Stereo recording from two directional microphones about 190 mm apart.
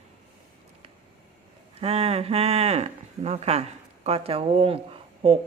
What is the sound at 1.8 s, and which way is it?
Speech, 30° right (ahead or behind).